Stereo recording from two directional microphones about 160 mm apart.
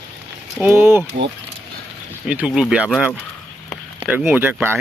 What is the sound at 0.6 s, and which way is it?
Speech, 15° right (ahead or behind).